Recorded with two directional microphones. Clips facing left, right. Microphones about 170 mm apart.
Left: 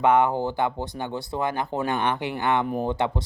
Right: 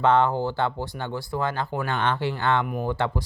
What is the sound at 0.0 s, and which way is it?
Speech, 15° left (ahead or behind).